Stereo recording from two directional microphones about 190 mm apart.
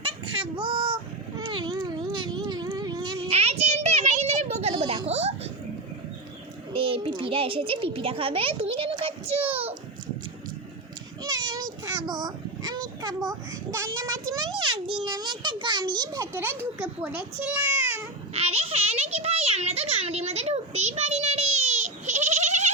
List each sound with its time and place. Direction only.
0.0 s child singing: 25° right (ahead or behind)
1.4 s cat: 25° right (ahead or behind)
6.7 s a child's voice: 30° right (ahead or behind)
11.2 s child singing: 20° right (ahead or behind)
13.7 s a child's voice: 15° right (ahead or behind)
18.3 s a sound: 30° right (ahead or behind)